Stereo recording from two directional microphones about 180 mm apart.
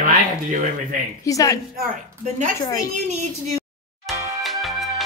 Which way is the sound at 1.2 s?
20° left (ahead or behind).